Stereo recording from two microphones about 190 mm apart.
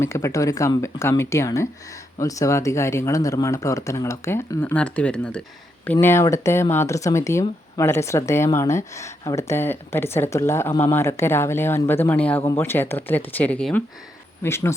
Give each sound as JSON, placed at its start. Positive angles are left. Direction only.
{"t": 0.0, "sound": "speech", "side_deg": 15}